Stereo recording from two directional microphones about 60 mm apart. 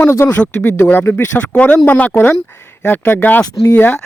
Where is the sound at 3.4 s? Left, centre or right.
Left.